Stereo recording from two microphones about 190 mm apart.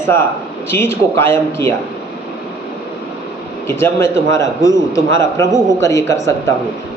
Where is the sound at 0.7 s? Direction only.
15° left (ahead or behind).